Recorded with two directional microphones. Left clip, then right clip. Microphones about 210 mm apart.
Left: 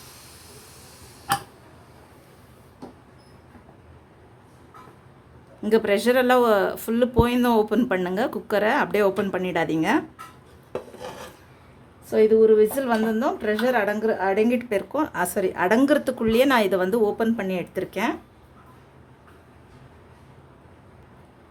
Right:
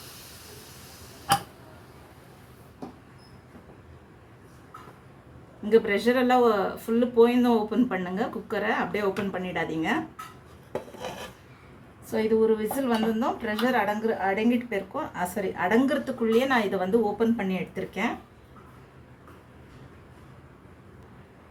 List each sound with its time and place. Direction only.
5.6 s speech: 55° left (ahead or behind)
12.1 s speech: 40° left (ahead or behind)